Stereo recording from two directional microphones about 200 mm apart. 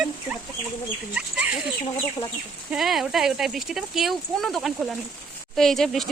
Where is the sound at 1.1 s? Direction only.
5° right (ahead or behind).